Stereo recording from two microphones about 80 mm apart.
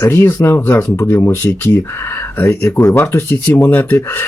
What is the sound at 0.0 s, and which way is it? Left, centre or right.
Speech, left.